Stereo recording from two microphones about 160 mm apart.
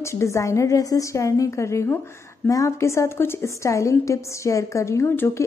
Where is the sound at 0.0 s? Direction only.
15° left (ahead or behind).